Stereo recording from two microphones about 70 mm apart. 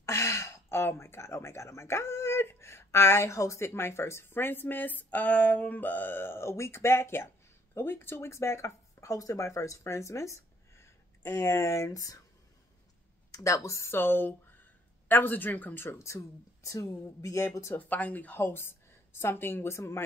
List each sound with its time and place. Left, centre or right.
0.0 s speech: left
13.3 s speech: left
13.9 s speech: left
16.0 s speech: left
17.7 s speech: left